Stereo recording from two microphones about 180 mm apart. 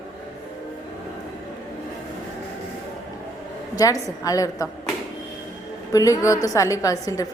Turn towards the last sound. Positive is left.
turn(degrees=20)  # may be behind; listen again after turning